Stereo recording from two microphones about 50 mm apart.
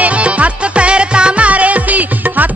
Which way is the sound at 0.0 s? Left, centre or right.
Right.